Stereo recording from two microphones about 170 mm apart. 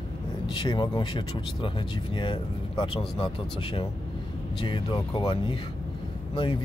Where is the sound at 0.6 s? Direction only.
30° left (ahead or behind).